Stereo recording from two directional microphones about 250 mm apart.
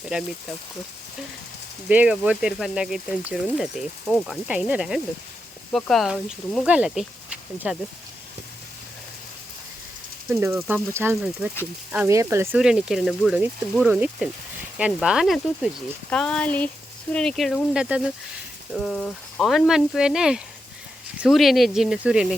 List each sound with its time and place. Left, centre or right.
0.0 s speech: centre
1.9 s speech: centre
10.2 s speech: centre